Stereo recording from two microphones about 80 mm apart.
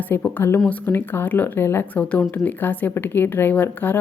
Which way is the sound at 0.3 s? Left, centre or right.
Left.